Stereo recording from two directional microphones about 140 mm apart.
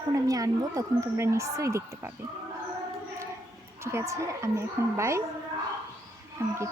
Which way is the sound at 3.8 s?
20° right (ahead or behind).